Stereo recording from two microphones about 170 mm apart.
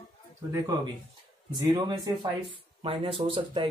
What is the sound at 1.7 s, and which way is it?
Speech, 25° right (ahead or behind).